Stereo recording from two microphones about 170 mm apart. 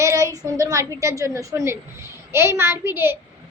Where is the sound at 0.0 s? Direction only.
20° right (ahead or behind).